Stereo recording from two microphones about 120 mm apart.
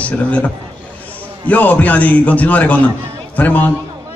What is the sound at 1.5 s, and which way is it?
A man's voice, 15° left (ahead or behind).